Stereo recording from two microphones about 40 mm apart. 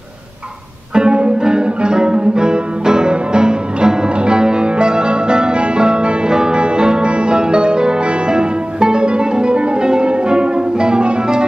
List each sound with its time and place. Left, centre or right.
0.9 s music: right